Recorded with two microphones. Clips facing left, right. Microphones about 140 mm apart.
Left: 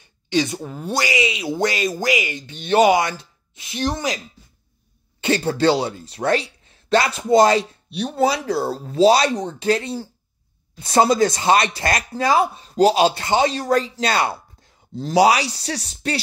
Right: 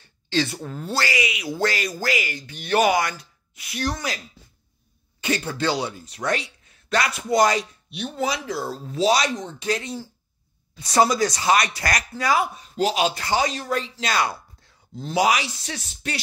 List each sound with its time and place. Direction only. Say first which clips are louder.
0.0 s speech: left 3 dB; 15° left (ahead or behind)
5.2 s speech: left 7 dB; 30° left (ahead or behind)